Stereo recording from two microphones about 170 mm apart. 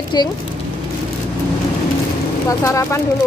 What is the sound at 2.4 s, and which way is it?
Speech, 20° left (ahead or behind).